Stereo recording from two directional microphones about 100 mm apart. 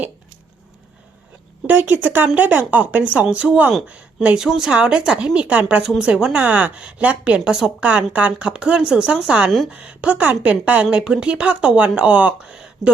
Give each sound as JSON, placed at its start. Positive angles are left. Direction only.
{"t": 1.6, "sound": "a woman's voice", "side_deg": -20}